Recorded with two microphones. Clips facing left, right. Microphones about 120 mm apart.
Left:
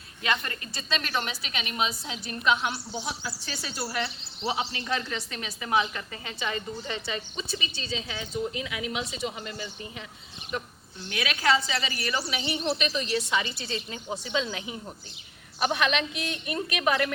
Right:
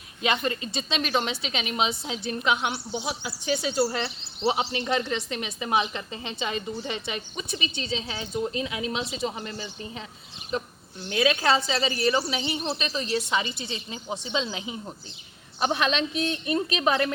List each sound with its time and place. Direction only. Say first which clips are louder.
0.2 s a woman's voice: right 4 dB; 20° right (ahead or behind)